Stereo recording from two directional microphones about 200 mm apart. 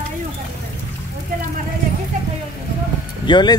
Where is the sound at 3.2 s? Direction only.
20° left (ahead or behind).